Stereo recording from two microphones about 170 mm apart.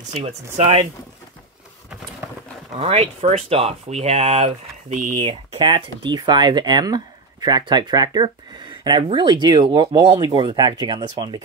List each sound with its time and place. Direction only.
0.1 s speech: 40° right (ahead or behind)
2.8 s speech: 35° right (ahead or behind)
5.6 s speech: 30° right (ahead or behind)